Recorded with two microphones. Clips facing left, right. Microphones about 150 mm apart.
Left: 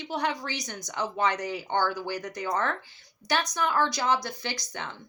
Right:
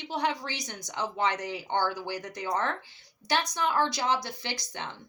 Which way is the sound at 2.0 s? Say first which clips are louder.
Left 2 dB; 25° right (ahead or behind).